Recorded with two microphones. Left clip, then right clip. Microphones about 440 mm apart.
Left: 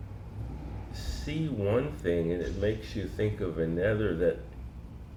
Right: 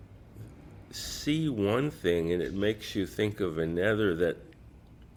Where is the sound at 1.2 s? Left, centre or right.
Right.